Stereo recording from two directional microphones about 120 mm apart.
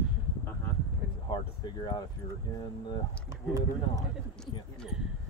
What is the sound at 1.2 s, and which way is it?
Speech, 40° left (ahead or behind).